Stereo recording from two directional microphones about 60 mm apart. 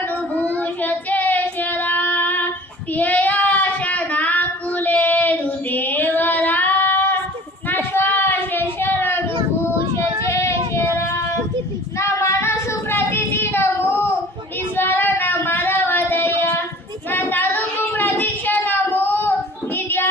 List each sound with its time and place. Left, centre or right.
0.3 s child singing: left
9.9 s child singing: left